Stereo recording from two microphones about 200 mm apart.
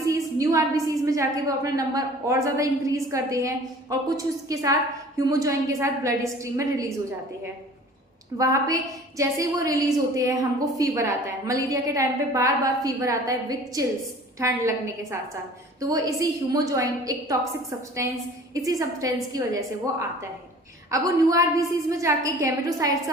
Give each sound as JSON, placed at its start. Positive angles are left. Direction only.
{"t": 0.1, "sound": "a woman's voice", "side_deg": -15}
{"t": 8.4, "sound": "a woman's voice", "side_deg": -15}
{"t": 15.8, "sound": "a woman's voice", "side_deg": -15}